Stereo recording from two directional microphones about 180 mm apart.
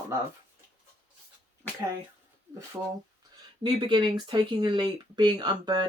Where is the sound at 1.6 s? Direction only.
10° left (ahead or behind).